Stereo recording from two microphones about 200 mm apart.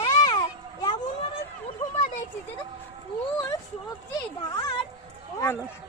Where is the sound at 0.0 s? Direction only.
20° left (ahead or behind).